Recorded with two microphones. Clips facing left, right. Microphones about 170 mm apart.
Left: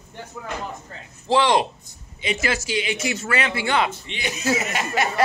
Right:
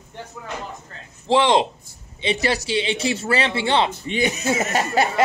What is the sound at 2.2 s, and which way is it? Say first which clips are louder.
Speech: right 3 dB; 35° right (ahead or behind).